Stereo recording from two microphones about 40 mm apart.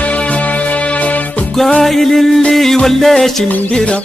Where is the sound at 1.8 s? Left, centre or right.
Centre.